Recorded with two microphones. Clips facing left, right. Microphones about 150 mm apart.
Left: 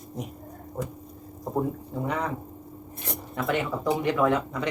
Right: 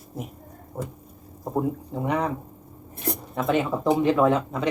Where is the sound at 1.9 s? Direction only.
20° right (ahead or behind).